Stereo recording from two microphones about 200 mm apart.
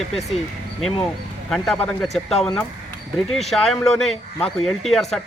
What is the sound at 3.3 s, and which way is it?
Speech, centre (ahead or behind).